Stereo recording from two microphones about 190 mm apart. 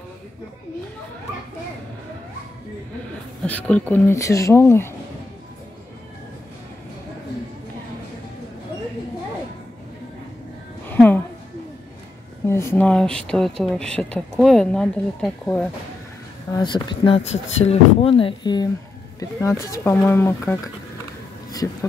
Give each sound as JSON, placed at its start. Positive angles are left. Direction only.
{"t": 3.4, "sound": "speech", "side_deg": 5}
{"t": 10.9, "sound": "a sound", "side_deg": 10}
{"t": 12.4, "sound": "speech", "side_deg": 15}
{"t": 16.5, "sound": "speech", "side_deg": 25}